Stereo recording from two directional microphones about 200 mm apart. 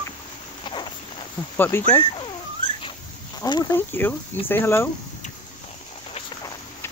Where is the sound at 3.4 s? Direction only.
20° left (ahead or behind).